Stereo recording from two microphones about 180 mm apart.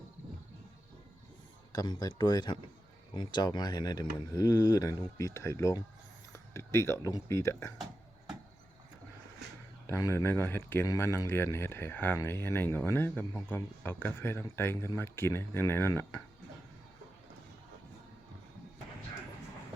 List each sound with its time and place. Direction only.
1.7 s speech: 20° left (ahead or behind)
9.8 s speech: 15° left (ahead or behind)